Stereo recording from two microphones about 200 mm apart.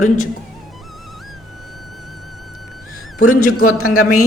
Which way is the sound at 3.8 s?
45° left (ahead or behind).